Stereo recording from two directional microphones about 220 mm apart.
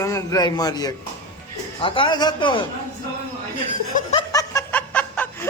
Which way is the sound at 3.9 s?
35° left (ahead or behind).